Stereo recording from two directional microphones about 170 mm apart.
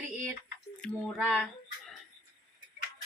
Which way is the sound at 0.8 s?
Centre (ahead or behind).